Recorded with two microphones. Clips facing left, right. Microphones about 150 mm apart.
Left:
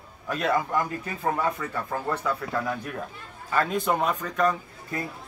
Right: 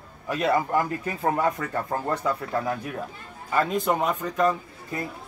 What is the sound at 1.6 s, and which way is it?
Speech, 35° right (ahead or behind).